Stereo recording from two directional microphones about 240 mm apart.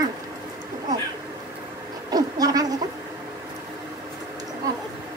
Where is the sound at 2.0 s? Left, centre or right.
Centre.